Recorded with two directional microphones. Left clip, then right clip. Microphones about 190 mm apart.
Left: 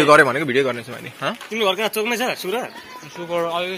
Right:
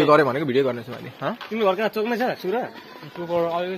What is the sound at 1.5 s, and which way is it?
Speech, 45° right (ahead or behind).